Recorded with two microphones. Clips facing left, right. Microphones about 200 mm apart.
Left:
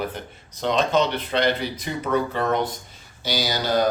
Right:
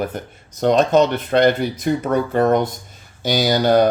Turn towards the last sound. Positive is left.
turn(degrees=-55)  # may be behind; listen again after turning